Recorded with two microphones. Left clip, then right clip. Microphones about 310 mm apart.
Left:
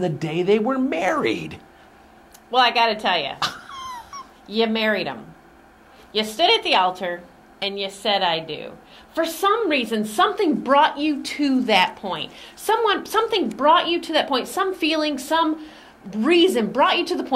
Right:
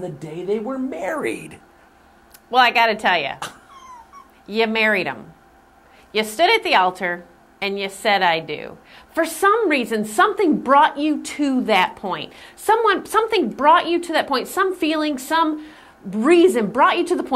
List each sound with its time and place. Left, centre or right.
0.0 s a woman's voice: left
1.1 s a woman's voice: centre
2.5 s a woman's voice: right
4.5 s a woman's voice: right
6.3 s a woman's voice: right